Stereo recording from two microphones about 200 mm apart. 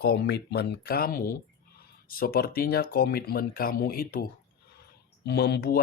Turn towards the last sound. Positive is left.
turn(degrees=50)  # may be behind; listen again after turning